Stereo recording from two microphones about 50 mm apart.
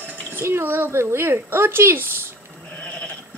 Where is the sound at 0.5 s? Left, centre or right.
Right.